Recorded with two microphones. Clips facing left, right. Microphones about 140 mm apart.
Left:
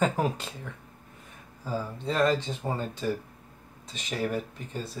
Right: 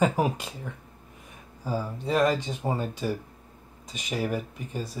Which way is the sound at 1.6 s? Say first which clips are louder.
Right 2 dB; 10° right (ahead or behind).